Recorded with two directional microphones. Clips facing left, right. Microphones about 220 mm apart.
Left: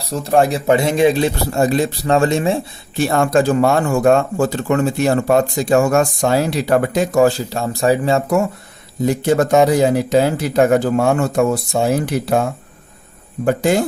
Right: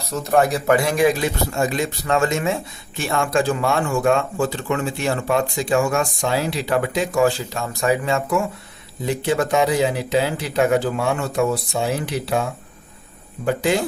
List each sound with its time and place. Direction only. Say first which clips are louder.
0.0 s a man's voice: left 3 dB; 30° left (ahead or behind); by 13.8 s 45° left (ahead or behind)